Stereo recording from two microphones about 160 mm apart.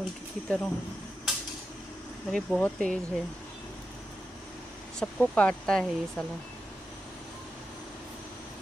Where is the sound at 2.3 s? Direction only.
5° left (ahead or behind).